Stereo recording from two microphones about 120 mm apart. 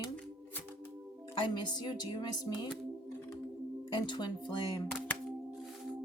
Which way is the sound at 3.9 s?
40° left (ahead or behind).